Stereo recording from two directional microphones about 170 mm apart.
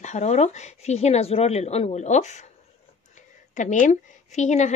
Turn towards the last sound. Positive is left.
turn(degrees=45)  # may be behind; listen again after turning